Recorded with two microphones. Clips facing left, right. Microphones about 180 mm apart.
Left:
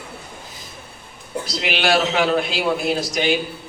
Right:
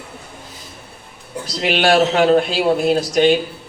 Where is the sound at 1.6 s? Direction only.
50° right (ahead or behind).